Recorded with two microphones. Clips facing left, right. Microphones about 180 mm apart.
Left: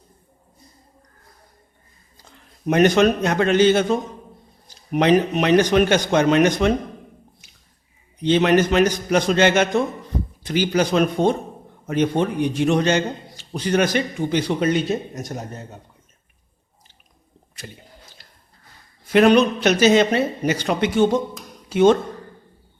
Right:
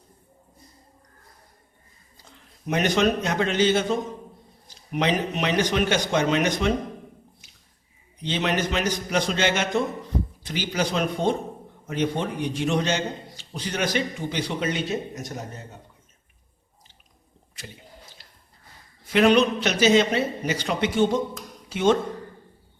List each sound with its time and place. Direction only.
2.6 s a man's voice: 50° left (ahead or behind)
4.9 s a man's voice: 55° left (ahead or behind)
8.2 s a man's voice: 55° left (ahead or behind)
19.1 s a man's voice: 50° left (ahead or behind)